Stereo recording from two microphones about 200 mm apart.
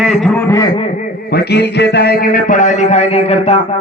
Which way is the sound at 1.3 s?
55° left (ahead or behind).